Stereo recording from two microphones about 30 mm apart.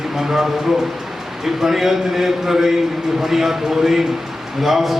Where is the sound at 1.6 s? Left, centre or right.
Centre.